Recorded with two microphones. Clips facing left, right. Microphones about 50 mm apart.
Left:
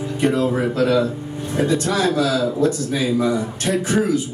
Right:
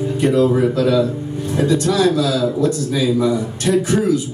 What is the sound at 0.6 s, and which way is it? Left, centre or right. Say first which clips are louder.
Speech: right 2 dB; left.